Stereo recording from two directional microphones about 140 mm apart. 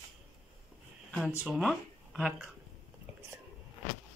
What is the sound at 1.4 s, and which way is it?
Speech, 5° right (ahead or behind).